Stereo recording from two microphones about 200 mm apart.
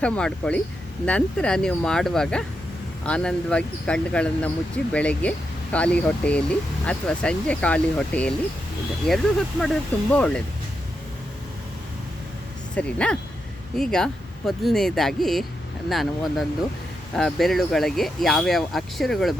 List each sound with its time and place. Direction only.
0.0 s speech: 5° left (ahead or behind)
12.7 s speech: 5° left (ahead or behind)